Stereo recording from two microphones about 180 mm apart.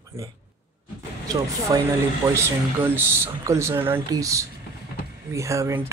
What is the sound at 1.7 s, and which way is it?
Speech, 20° right (ahead or behind).